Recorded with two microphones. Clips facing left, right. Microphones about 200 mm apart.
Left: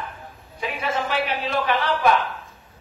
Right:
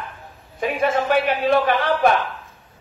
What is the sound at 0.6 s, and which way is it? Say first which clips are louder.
A woman's voice: right 6 dB; 50° right (ahead or behind).